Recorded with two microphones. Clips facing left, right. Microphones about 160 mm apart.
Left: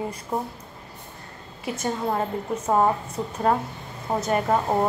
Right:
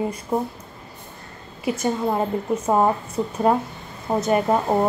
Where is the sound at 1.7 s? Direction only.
10° right (ahead or behind).